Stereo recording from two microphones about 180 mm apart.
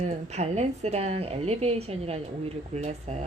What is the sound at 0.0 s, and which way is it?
A woman's voice, 35° right (ahead or behind).